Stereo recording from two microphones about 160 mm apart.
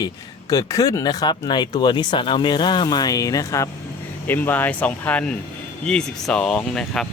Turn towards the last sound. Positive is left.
turn(degrees=5)  # may be behind; listen again after turning